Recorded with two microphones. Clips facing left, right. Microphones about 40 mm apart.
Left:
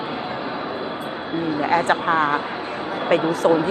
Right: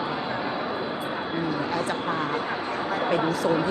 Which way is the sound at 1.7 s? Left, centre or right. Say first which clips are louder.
Left 8 dB; left.